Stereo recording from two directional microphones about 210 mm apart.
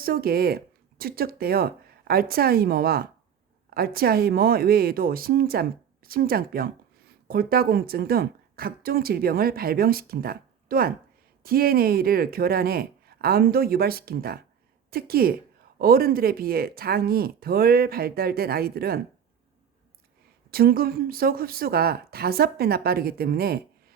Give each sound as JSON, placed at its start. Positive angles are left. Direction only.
{"t": 0.0, "sound": "a woman's voice", "side_deg": -45}
{"t": 20.5, "sound": "a woman's voice", "side_deg": -45}